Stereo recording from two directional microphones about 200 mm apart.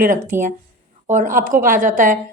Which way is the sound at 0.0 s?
40° right (ahead or behind).